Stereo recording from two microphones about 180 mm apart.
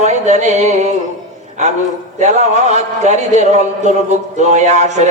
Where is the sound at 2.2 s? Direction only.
40° right (ahead or behind).